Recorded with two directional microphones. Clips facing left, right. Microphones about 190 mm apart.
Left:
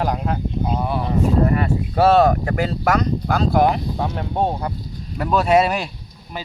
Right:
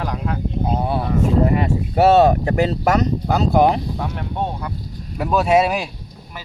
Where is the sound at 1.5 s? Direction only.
20° right (ahead or behind).